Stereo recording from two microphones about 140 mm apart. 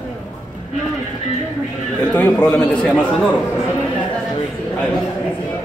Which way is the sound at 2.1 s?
10° left (ahead or behind).